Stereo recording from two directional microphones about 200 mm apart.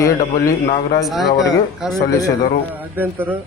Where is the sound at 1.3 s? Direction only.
20° left (ahead or behind).